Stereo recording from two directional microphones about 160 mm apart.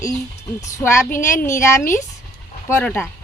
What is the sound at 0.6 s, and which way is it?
A woman's voice, 15° left (ahead or behind).